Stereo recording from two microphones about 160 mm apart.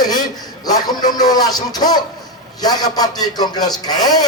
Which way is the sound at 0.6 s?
25° left (ahead or behind).